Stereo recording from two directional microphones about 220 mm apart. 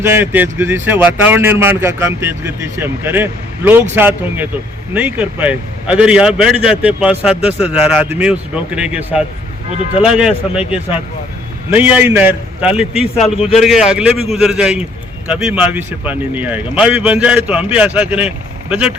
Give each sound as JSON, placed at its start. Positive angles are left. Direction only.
{"t": 0.0, "sound": "a man's voice", "side_deg": -10}